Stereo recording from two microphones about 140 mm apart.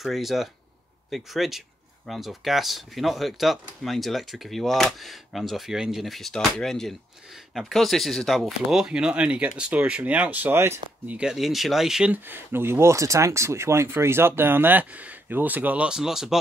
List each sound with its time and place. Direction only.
0.0 s speech: centre (ahead or behind); by 11.1 s 15° right (ahead or behind)
11.1 s speech: 5° right (ahead or behind)